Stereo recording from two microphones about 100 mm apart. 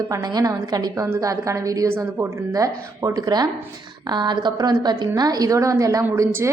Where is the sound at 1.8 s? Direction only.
25° right (ahead or behind).